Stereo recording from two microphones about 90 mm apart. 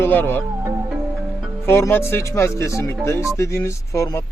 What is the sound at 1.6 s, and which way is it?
A man's voice, 25° left (ahead or behind).